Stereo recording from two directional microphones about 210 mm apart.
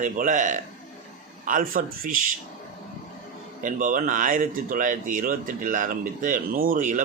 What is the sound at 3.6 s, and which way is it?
Speech, 40° right (ahead or behind).